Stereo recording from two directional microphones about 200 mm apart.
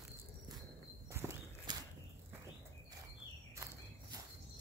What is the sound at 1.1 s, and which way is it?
Walk, 15° right (ahead or behind).